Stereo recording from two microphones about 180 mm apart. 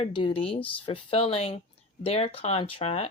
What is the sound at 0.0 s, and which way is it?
Speech, 25° left (ahead or behind).